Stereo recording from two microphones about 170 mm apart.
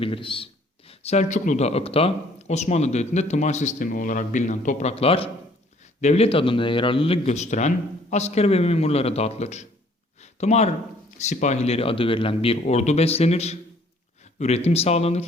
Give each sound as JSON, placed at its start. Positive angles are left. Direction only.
{"t": 0.0, "sound": "speech", "side_deg": 30}
{"t": 10.2, "sound": "a sound", "side_deg": 40}
{"t": 11.2, "sound": "speech", "side_deg": 45}